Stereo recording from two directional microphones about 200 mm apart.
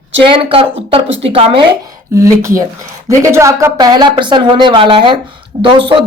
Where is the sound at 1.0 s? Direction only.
65° right (ahead or behind).